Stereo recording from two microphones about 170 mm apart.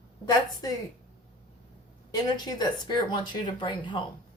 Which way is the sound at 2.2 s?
25° left (ahead or behind).